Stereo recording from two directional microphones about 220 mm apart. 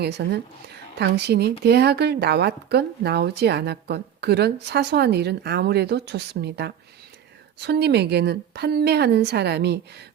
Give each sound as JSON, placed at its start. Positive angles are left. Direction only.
{"t": 0.0, "sound": "a woman's voice", "side_deg": -50}